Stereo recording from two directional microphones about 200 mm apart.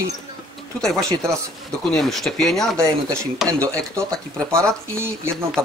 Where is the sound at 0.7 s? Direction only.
5° left (ahead or behind).